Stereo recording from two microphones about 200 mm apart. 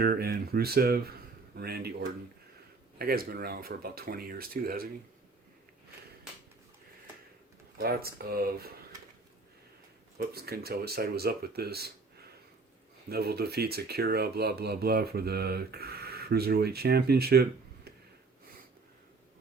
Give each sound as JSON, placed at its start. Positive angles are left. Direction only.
{"t": 0.0, "sound": "speech", "side_deg": -50}
{"t": 7.8, "sound": "speech", "side_deg": -50}
{"t": 10.2, "sound": "speech", "side_deg": -50}
{"t": 13.1, "sound": "speech", "side_deg": -50}